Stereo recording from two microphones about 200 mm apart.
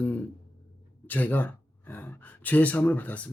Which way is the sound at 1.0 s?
10° left (ahead or behind).